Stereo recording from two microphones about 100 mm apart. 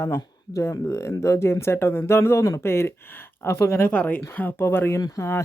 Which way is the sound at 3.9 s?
15° left (ahead or behind).